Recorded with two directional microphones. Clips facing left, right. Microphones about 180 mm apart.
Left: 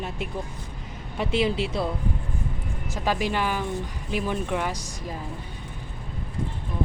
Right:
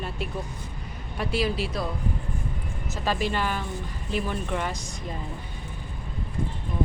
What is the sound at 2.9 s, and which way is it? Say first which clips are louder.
Speech: left 1 dB; 15° left (ahead or behind).